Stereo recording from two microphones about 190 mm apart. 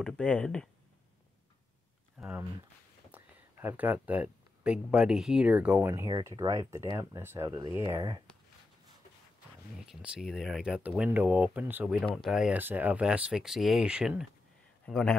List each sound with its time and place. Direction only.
0.0 s speech: 5° left (ahead or behind)
2.1 s speech: 5° right (ahead or behind); by 8.2 s 20° right (ahead or behind)
9.8 s speech: 5° right (ahead or behind)